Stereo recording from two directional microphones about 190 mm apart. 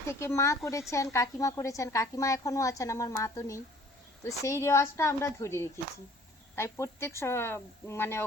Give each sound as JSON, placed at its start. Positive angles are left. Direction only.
{"t": 0.1, "sound": "a woman's voice", "side_deg": 15}